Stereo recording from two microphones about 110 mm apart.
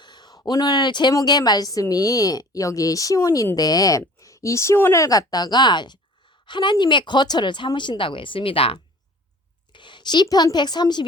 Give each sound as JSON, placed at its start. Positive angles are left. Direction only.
{"t": 0.0, "sound": "a sound", "side_deg": 40}
{"t": 1.1, "sound": "a woman's voice", "side_deg": 35}
{"t": 9.7, "sound": "a woman's voice", "side_deg": 45}